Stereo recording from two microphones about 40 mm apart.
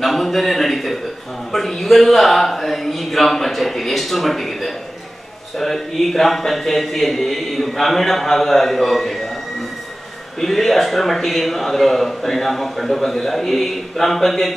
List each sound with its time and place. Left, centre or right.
0.0 s a man's voice: centre
10.4 s a man's voice: centre